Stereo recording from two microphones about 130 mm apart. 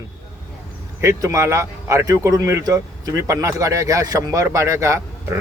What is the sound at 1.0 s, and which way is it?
Speech, 25° right (ahead or behind).